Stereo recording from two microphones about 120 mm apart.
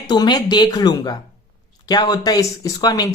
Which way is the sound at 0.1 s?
35° left (ahead or behind).